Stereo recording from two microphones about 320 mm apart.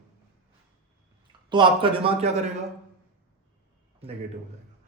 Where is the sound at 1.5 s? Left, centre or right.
Centre.